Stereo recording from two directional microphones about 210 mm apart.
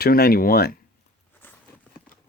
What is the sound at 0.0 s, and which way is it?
Speech, 45° left (ahead or behind).